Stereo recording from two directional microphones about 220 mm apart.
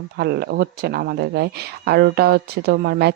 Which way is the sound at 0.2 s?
50° right (ahead or behind).